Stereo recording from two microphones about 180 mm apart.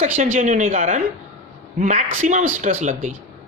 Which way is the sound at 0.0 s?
45° right (ahead or behind).